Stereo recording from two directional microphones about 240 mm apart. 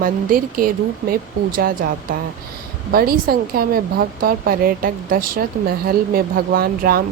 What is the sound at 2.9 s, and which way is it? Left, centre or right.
Speech, right.